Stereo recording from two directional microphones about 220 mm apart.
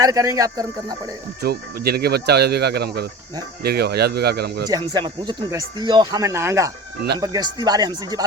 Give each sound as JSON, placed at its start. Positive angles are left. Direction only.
{"t": 0.0, "sound": "speech", "side_deg": -15}
{"t": 1.4, "sound": "speech", "side_deg": -45}
{"t": 4.7, "sound": "speech", "side_deg": -20}